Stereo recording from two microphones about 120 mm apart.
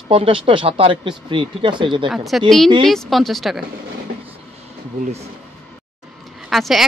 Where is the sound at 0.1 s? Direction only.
50° right (ahead or behind).